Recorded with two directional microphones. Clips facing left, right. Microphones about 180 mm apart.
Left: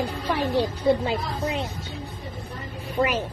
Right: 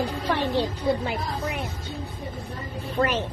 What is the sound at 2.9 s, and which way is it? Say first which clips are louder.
Speech: left 1 dB; 5° left (ahead or behind).